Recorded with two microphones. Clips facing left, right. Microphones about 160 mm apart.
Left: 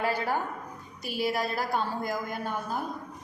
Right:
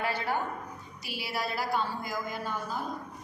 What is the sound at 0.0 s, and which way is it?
A woman's voice, 40° left (ahead or behind).